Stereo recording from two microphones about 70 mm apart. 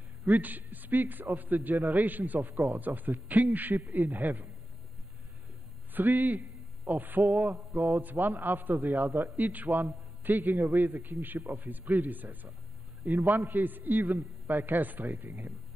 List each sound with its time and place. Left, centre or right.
0.3 s a man's voice: right
5.9 s a man's voice: right